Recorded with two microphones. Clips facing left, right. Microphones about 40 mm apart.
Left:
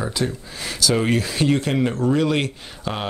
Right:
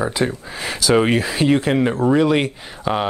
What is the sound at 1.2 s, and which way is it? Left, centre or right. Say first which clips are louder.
Speech: right 3 dB; centre.